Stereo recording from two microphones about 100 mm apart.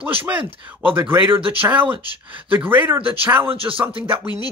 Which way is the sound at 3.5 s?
65° right (ahead or behind).